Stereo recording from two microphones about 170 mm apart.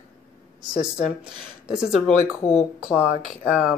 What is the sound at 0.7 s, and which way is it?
Speech, 5° right (ahead or behind).